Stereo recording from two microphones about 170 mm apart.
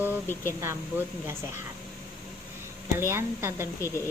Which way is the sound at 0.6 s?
15° right (ahead or behind).